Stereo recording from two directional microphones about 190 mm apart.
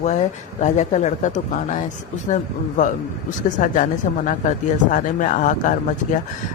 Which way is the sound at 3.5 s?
40° left (ahead or behind).